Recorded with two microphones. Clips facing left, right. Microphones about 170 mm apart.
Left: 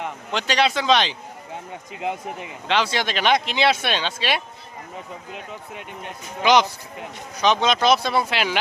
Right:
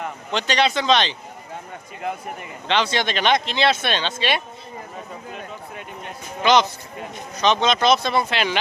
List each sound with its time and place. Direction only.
0.3 s speech: 5° left (ahead or behind)
2.0 s speech: 20° left (ahead or behind)
2.6 s speech: 5° left (ahead or behind)
6.4 s speech: 10° left (ahead or behind)